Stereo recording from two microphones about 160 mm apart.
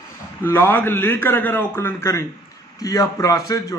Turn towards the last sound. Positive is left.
turn(degrees=20)  # may be behind; listen again after turning